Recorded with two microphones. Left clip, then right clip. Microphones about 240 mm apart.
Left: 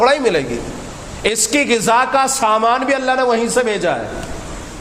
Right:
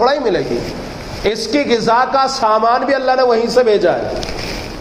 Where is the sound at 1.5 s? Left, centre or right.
Left.